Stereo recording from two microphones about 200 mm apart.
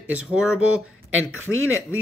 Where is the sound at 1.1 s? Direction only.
80° right.